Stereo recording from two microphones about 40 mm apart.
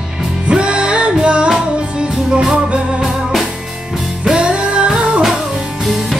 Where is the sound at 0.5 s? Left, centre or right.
Right; by 3.5 s centre.